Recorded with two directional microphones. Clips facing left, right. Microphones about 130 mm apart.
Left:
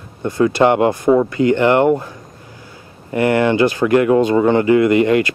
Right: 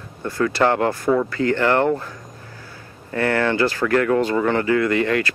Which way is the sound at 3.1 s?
15° left (ahead or behind).